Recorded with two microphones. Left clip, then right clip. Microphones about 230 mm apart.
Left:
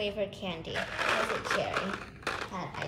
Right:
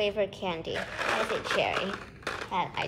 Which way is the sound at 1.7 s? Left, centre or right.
Centre.